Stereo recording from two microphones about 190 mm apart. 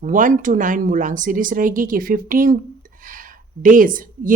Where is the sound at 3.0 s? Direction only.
45° right (ahead or behind).